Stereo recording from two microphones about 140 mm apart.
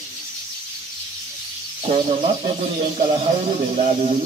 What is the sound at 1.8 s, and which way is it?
Speech, 50° right (ahead or behind).